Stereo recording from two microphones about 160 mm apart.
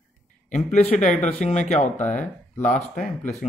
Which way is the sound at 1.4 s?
45° left (ahead or behind).